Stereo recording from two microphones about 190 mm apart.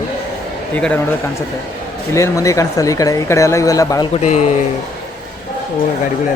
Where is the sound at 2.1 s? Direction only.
15° left (ahead or behind).